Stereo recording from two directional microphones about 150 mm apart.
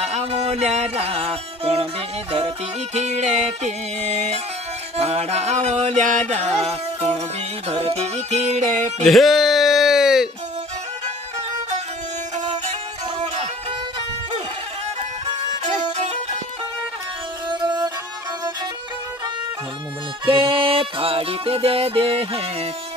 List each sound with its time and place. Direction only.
0.0 s music: 45° right (ahead or behind)
9.0 s music: centre (ahead or behind)
15.6 s music: 50° right (ahead or behind)
17.5 s music: 30° right (ahead or behind)
20.2 s music: 35° right (ahead or behind)